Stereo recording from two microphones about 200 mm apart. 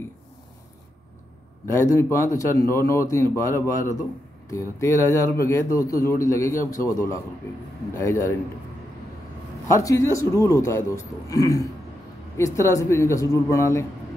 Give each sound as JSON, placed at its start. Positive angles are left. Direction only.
{"t": 1.7, "sound": "a man's voice", "side_deg": 15}
{"t": 9.7, "sound": "a man's voice", "side_deg": 15}